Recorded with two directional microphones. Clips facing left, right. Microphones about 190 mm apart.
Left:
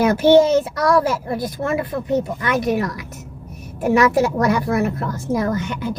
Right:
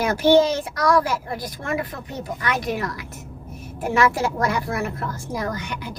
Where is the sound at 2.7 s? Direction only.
20° left (ahead or behind).